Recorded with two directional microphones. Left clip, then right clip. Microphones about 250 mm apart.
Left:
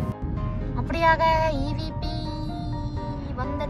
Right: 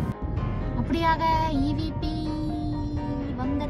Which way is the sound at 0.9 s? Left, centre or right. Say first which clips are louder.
Left 3 dB; centre.